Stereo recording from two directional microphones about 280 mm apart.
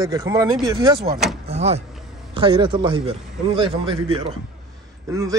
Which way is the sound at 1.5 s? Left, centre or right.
Right.